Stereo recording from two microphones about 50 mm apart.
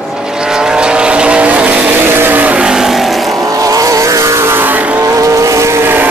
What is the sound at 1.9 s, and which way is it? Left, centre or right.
Vehicle, right.